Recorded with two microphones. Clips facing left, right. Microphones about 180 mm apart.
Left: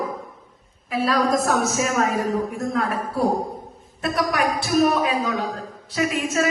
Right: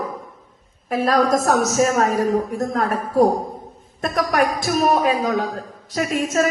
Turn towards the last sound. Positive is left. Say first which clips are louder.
# right 2 dB
turn(degrees=-40)  # may be behind; listen again after turning